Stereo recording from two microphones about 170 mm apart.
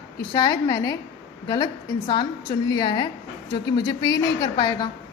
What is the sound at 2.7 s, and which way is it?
A woman's voice, 25° left (ahead or behind).